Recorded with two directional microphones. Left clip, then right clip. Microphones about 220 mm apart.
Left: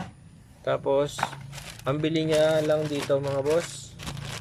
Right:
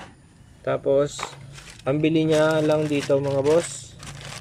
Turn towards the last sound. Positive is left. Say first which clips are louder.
# right 5 dB
turn(degrees=-10)  # may be behind; listen again after turning